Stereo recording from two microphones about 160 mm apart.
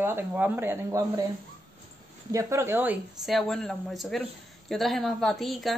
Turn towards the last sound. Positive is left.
turn(degrees=0)  # may be behind; listen again after turning